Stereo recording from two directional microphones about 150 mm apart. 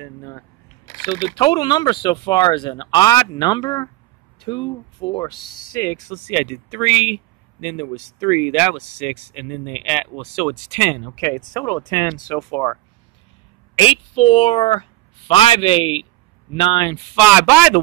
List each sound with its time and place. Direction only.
0.0 s speech: 20° left (ahead or behind)
6.3 s speech: 5° right (ahead or behind)
11.1 s speech: 20° left (ahead or behind)
12.4 s speech: 10° left (ahead or behind)
13.7 s a woman's voice: 40° left (ahead or behind)
17.1 s speech: 10° right (ahead or behind)